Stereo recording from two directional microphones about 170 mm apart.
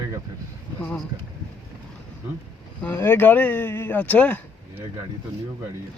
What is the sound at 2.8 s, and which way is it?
Speech, 15° left (ahead or behind).